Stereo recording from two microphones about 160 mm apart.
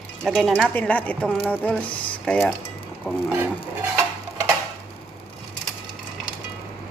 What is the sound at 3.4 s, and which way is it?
Stir, 15° right (ahead or behind).